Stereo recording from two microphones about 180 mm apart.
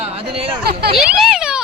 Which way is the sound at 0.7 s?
65° right (ahead or behind).